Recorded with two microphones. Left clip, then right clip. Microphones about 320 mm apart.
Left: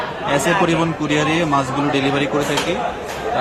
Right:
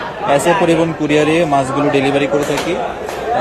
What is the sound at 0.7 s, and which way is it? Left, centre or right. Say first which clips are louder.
Speech: right 5 dB; centre.